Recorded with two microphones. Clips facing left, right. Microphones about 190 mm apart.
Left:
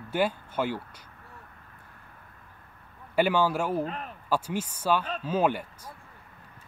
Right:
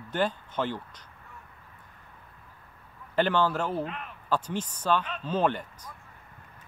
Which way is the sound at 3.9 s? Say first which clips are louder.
Left 3 dB; 40° left (ahead or behind).